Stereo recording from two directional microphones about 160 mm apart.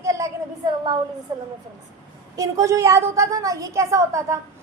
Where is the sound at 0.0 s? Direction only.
20° right (ahead or behind).